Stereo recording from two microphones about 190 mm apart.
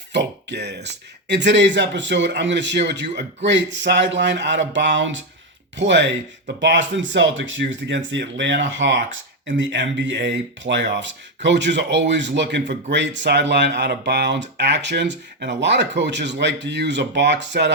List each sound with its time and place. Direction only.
0.1 s a man's voice: 65° right (ahead or behind)